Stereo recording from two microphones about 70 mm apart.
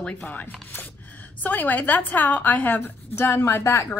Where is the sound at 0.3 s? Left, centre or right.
Left.